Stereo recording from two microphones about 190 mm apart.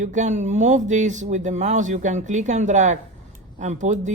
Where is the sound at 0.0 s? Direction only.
40° right (ahead or behind).